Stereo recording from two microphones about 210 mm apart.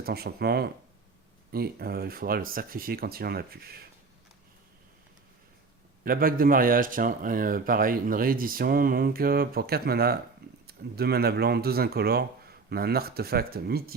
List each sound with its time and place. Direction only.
0.0 s a man's voice: 45° right (ahead or behind)
6.1 s a man's voice: 45° right (ahead or behind)